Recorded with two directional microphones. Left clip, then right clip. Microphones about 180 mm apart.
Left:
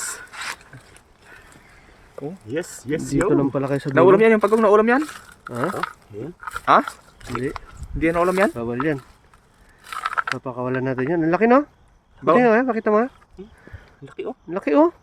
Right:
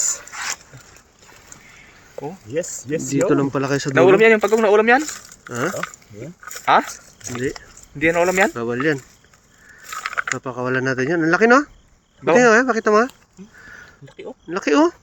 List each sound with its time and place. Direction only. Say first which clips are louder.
0.3 s a sound: right 3 dB; centre (ahead or behind)
2.5 s speech: right 2 dB; 65° left (ahead or behind)
3.2 s speech: right 1 dB; 10° left (ahead or behind)
3.9 s speech: right 1 dB; 35° left (ahead or behind)
5.5 s speech: right 1 dB; 5° left (ahead or behind)
7.9 s speech: right 2 dB; 30° left (ahead or behind)
8.5 s speech: right 3 dB; 10° left (ahead or behind)
14.0 s speech: left 6 dB; 65° left (ahead or behind)
14.5 s speech: right 1 dB; 10° left (ahead or behind)